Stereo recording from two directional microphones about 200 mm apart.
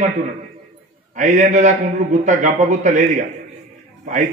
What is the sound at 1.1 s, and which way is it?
A man's voice, 35° right (ahead or behind).